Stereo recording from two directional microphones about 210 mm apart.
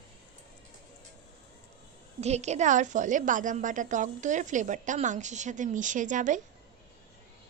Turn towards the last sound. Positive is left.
turn(degrees=-35)  # may be behind; listen again after turning